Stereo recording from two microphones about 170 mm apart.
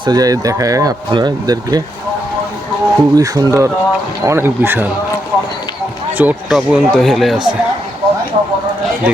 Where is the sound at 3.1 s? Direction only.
20° right (ahead or behind).